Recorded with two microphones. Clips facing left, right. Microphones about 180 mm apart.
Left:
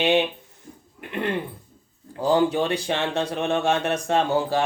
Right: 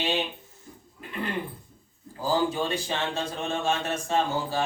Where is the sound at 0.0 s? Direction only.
65° left (ahead or behind).